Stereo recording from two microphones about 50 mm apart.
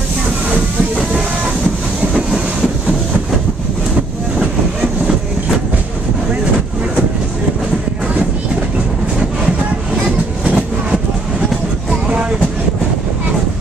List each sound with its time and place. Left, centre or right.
10.4 s train: right
12.1 s vehicle: right